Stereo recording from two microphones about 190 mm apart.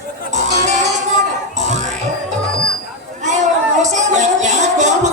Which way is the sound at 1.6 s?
40° right (ahead or behind).